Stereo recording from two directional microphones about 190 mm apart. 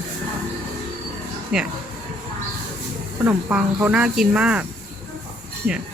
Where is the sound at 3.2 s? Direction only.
5° right (ahead or behind).